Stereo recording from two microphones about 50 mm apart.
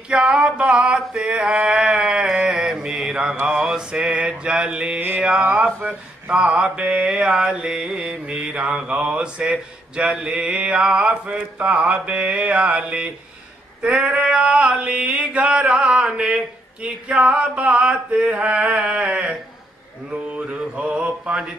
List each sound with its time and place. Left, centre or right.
0.1 s speech: centre
1.7 s a sound: centre
2.4 s mantra: centre
5.4 s speech: right
7.2 s mantra: centre
7.5 s speech: right
20.1 s mantra: right